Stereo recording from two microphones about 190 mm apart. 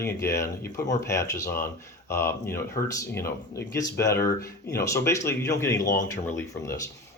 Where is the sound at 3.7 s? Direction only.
15° left (ahead or behind).